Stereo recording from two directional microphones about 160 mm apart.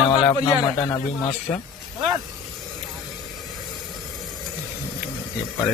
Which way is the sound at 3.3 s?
Centre (ahead or behind).